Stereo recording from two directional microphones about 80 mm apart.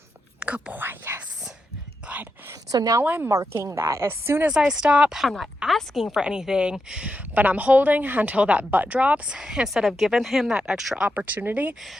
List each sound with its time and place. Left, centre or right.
0.3 s whispering: centre
2.7 s a woman's voice: right
3.0 s speech: right
3.2 s speech: right
4.4 s a woman's voice: centre
6.1 s a woman's voice: centre
11.1 s speech: centre